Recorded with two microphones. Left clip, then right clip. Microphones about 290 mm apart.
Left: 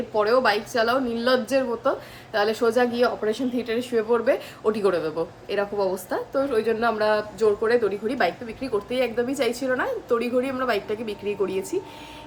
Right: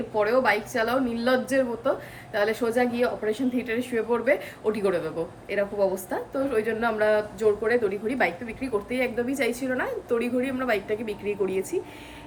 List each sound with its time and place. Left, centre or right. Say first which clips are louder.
0.1 s a woman's voice: left 2 dB; centre
6.1 s a woman's voice: left 3 dB; centre